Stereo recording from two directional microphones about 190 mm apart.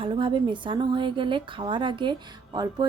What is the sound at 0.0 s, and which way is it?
A woman's voice, 25° right (ahead or behind).